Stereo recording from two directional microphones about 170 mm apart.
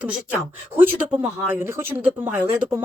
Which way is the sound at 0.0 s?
10° right (ahead or behind).